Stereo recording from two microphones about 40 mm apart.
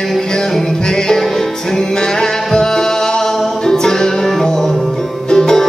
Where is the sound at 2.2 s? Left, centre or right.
Centre.